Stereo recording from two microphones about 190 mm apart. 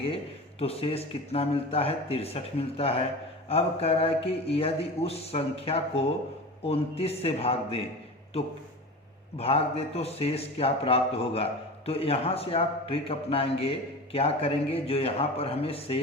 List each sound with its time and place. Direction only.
0.6 s a man's voice: 30° left (ahead or behind)